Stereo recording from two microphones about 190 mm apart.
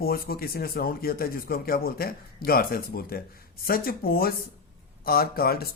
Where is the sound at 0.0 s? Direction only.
50° left (ahead or behind).